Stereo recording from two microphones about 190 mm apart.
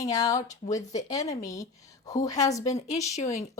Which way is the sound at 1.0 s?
15° left (ahead or behind).